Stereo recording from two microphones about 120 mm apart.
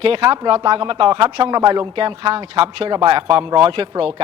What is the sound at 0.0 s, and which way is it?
Speech, 50° right (ahead or behind).